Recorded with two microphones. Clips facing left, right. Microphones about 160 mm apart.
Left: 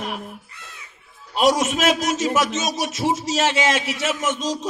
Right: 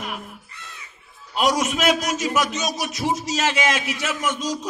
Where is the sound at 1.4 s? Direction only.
25° left (ahead or behind).